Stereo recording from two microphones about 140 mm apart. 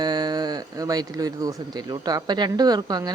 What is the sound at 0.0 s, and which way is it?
Speech, 30° right (ahead or behind).